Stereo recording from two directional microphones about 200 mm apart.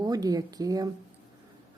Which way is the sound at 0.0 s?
20° right (ahead or behind).